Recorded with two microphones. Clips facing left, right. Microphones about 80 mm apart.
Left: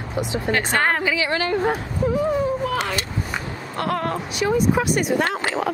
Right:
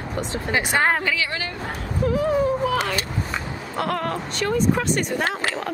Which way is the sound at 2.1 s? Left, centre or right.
Centre.